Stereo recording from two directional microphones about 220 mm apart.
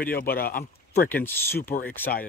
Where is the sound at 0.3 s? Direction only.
40° left (ahead or behind).